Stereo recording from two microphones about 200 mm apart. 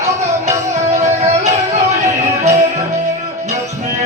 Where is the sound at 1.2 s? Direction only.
35° right (ahead or behind).